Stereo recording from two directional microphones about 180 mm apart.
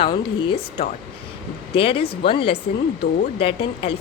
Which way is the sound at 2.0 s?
60° left (ahead or behind).